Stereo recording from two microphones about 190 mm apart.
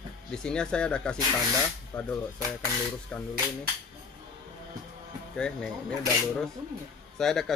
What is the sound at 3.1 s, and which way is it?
Speech, 5° left (ahead or behind).